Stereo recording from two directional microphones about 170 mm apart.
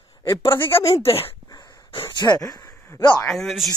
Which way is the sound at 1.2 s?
20° left (ahead or behind).